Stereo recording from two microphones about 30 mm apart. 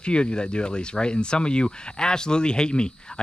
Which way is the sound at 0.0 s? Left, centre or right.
Left.